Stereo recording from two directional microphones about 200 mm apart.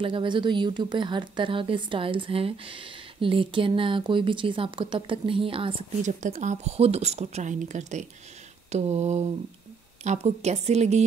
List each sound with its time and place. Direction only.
0.0 s a woman's voice: 25° right (ahead or behind)